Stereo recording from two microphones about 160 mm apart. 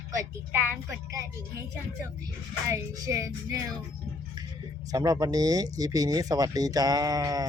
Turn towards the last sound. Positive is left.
turn(degrees=-20)  # may be behind; listen again after turning